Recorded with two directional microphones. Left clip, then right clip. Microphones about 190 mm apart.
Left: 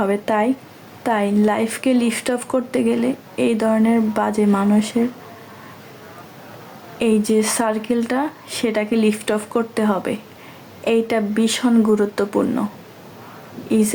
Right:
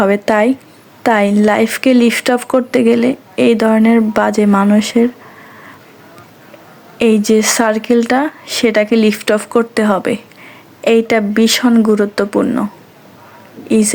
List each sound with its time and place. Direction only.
0.0 s speech: 35° right (ahead or behind)
7.0 s speech: 30° right (ahead or behind)
13.7 s speech: 30° right (ahead or behind)